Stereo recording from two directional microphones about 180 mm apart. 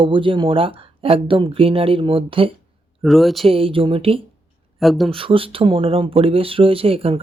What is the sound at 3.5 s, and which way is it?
Speech, 30° right (ahead or behind).